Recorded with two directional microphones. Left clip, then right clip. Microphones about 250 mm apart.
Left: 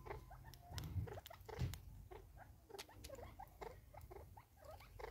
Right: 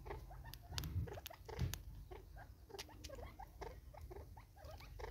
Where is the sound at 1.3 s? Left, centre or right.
Centre.